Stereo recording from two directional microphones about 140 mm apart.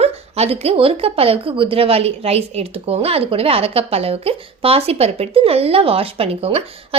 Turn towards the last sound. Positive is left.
turn(degrees=-40)  # may be behind; listen again after turning